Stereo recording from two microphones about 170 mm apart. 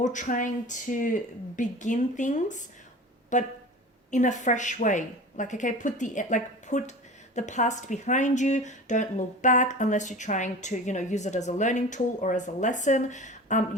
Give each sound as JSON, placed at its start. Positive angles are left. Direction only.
{"t": 0.0, "sound": "speech", "side_deg": 45}